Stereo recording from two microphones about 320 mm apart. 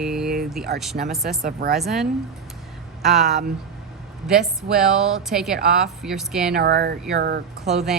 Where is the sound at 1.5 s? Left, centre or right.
Right.